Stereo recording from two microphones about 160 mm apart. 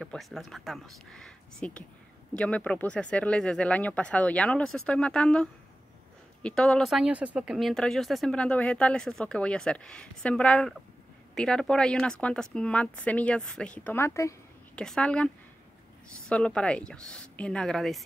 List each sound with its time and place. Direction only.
0.0 s speech: centre (ahead or behind)
14.8 s speech: 5° left (ahead or behind)